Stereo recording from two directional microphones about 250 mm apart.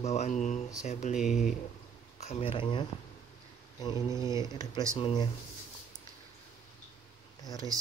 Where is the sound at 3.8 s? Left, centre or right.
Centre.